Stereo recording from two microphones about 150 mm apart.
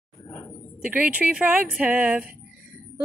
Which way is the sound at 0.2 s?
15° left (ahead or behind).